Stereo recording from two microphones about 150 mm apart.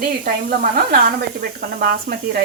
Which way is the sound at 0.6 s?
70° right (ahead or behind).